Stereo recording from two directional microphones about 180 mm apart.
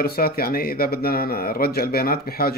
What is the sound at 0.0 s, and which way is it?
Speech, 55° left (ahead or behind).